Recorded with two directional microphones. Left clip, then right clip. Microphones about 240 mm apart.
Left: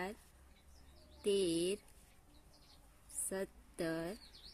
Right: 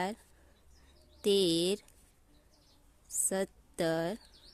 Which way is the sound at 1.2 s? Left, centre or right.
Right.